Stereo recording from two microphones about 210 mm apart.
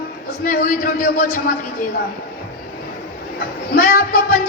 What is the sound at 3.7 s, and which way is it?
Speech, 45° left (ahead or behind).